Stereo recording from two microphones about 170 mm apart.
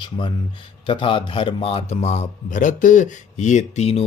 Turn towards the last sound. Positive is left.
turn(degrees=35)  # may be behind; listen again after turning